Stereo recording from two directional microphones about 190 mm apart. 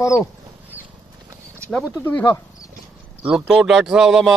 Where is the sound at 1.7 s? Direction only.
5° left (ahead or behind).